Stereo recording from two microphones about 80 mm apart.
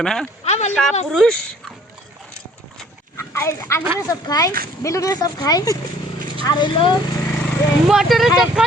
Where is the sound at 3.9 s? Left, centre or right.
Left.